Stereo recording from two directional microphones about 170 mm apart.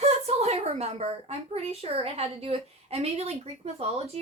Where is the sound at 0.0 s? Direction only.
40° right (ahead or behind).